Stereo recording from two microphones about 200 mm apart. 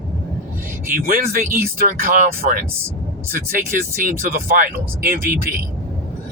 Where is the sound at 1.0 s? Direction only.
45° right (ahead or behind).